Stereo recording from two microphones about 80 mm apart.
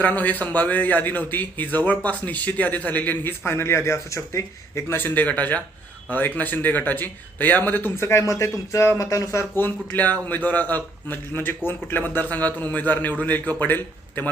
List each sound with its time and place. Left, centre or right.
0.0 s a man's voice: left